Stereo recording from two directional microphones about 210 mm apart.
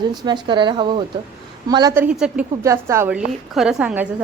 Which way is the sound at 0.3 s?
20° right (ahead or behind).